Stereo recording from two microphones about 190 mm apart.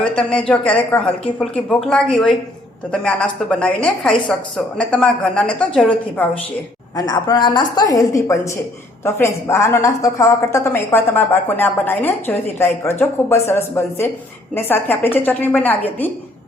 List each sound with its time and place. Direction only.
0.2 s a woman's voice: 5° left (ahead or behind)
6.9 s a woman's voice: 20° left (ahead or behind)